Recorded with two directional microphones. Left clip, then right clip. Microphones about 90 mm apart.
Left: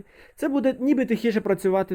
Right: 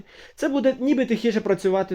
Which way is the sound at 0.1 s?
20° left (ahead or behind).